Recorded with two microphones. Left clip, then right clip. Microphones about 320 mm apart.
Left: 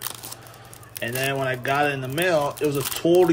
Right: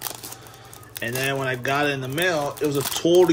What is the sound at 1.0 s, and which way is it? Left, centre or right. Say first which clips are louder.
Speech: even; centre.